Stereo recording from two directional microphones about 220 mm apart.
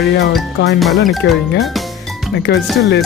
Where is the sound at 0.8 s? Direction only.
Centre (ahead or behind).